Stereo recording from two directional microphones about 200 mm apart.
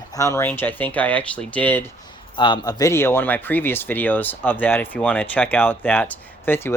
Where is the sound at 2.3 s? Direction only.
25° left (ahead or behind).